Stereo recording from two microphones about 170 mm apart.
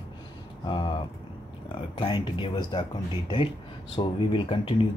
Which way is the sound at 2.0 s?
30° left (ahead or behind).